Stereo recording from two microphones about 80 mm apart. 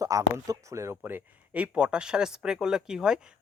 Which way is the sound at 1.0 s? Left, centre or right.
Right.